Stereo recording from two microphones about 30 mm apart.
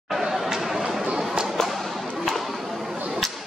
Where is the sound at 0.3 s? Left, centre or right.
Centre.